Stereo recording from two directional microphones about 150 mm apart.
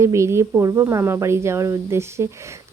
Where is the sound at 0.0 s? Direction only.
20° right (ahead or behind).